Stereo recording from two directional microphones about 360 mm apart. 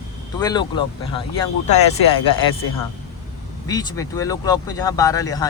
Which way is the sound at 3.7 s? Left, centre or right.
Centre.